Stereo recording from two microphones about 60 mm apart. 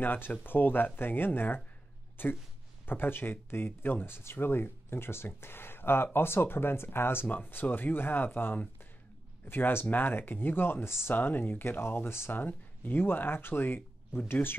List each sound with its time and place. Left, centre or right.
0.0 s speech: left